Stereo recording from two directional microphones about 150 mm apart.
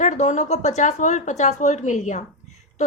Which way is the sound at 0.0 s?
55° left (ahead or behind).